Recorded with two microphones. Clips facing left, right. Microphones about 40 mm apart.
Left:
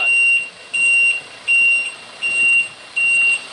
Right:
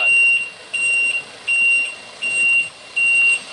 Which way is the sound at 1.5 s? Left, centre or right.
Centre.